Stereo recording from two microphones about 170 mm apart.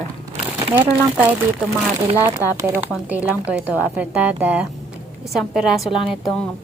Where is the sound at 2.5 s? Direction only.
15° right (ahead or behind).